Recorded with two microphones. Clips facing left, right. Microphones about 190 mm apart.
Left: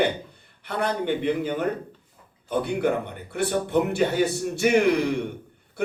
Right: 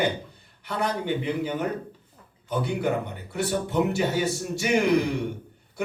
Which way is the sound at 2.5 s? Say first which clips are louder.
Left 2 dB; 55° left (ahead or behind).